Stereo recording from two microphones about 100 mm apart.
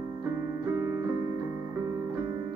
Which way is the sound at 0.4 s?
35° right (ahead or behind).